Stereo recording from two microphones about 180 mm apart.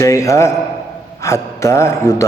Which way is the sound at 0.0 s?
15° left (ahead or behind).